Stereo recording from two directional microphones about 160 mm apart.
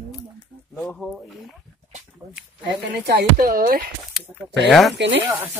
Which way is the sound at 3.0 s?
75° right (ahead or behind).